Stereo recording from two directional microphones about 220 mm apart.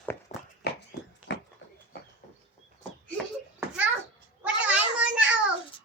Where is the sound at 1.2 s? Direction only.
5° right (ahead or behind).